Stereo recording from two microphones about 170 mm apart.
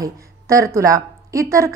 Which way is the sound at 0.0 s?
20° right (ahead or behind).